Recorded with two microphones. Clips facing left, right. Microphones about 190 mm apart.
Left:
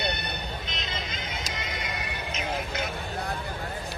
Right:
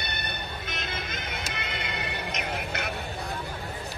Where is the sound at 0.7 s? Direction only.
55° right (ahead or behind).